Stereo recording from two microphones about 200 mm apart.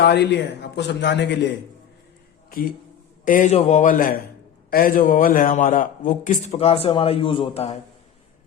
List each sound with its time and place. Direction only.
0.0 s a man's voice: 55° left (ahead or behind)
3.2 s a man's voice: 40° left (ahead or behind)